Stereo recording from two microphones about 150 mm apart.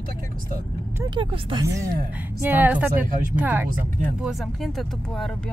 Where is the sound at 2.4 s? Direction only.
10° right (ahead or behind).